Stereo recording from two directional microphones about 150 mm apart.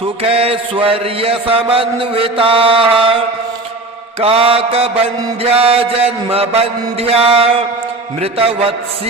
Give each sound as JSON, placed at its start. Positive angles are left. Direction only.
{"t": 0.0, "sound": "mantra", "side_deg": -40}
{"t": 4.2, "sound": "mantra", "side_deg": -40}